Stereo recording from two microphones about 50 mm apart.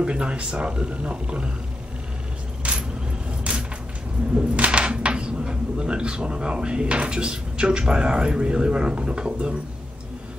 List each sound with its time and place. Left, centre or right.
0.0 s speech: right
2.6 s vehicle: right
4.4 s speech: right